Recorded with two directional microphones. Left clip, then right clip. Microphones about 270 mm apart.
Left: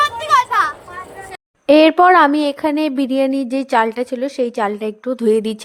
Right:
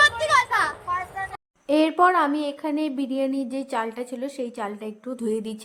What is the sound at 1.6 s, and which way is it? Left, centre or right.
Speech, left.